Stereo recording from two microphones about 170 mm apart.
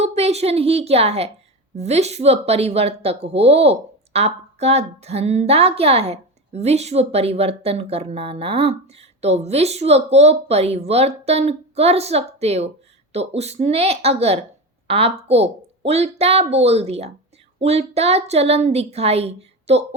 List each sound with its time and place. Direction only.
0.0 s a woman's voice: 40° right (ahead or behind)